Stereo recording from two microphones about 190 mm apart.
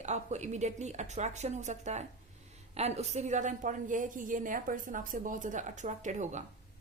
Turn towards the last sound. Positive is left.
turn(degrees=-40)  # may be behind; listen again after turning